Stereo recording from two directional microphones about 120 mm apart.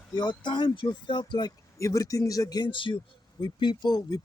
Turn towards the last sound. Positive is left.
turn(degrees=35)  # may be behind; listen again after turning